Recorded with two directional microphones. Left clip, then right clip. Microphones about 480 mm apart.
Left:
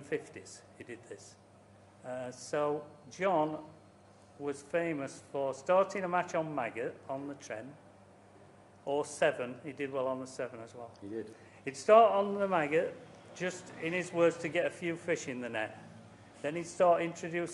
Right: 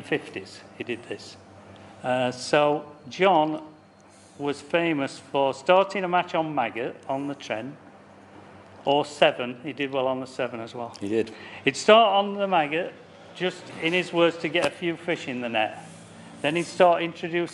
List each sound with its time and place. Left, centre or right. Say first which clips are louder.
0.1 s a man's voice: right 9 dB; centre
8.8 s a man's voice: right 10 dB; centre